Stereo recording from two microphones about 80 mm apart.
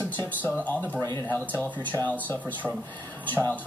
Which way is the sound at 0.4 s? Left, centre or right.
Left.